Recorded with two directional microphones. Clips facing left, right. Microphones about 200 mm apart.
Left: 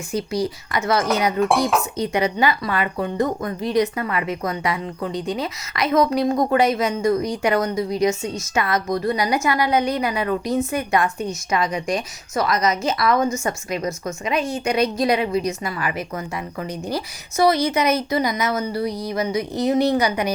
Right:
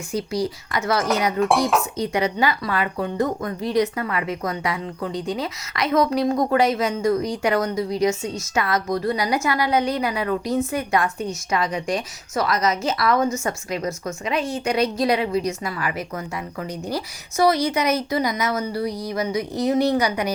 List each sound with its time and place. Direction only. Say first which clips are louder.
0.1 s a woman's voice: left 1 dB; 20° left (ahead or behind)
0.9 s dishes: left 1 dB; centre (ahead or behind)
2.0 s a woman's voice: left 1 dB; 20° left (ahead or behind)